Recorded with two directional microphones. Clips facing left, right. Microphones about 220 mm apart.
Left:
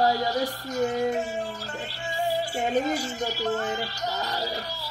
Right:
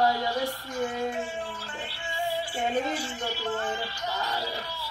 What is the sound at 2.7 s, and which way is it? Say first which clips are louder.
Female singing: left 6 dB; 40° left (ahead or behind).